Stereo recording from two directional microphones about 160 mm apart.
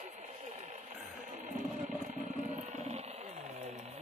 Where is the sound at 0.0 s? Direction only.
45° right (ahead or behind).